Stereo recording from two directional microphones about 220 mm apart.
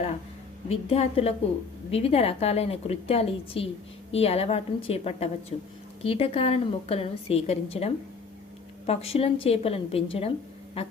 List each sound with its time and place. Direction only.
0.7 s a woman's voice: 25° left (ahead or behind)